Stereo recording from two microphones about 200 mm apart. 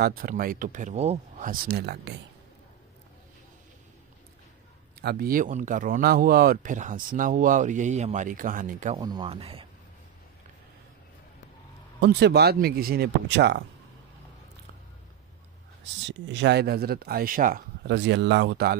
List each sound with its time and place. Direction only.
0.0 s speech: 45° right (ahead or behind); by 1.5 s 30° right (ahead or behind)
1.5 s speech: 55° right (ahead or behind)
5.0 s speech: 45° right (ahead or behind)
8.9 s speech: 20° right (ahead or behind)
12.0 s speech: 55° right (ahead or behind)
15.8 s speech: 65° right (ahead or behind)